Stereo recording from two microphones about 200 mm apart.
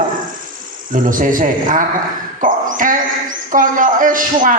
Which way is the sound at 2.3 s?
40° right (ahead or behind).